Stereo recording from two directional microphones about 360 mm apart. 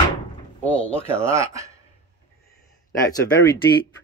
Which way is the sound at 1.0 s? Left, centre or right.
Centre.